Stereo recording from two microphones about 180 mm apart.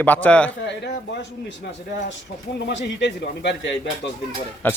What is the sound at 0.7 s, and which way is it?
Speech, 70° left (ahead or behind).